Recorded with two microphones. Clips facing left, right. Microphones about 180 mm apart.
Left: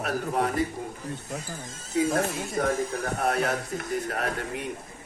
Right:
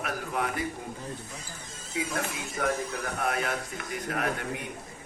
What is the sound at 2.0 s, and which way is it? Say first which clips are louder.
Speech: left 7 dB; 40° left (ahead or behind).